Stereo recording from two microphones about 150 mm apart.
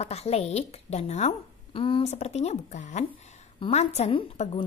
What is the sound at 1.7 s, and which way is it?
A woman's voice, 35° left (ahead or behind).